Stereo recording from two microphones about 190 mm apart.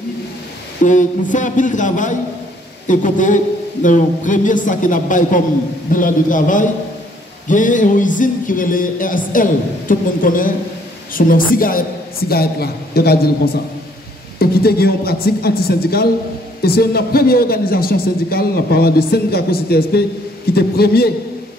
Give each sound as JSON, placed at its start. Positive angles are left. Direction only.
{"t": 0.8, "sound": "a woman's voice", "side_deg": 40}
{"t": 14.4, "sound": "a woman's voice", "side_deg": 55}